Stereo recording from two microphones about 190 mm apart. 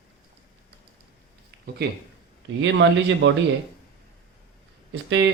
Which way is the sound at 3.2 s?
80° right.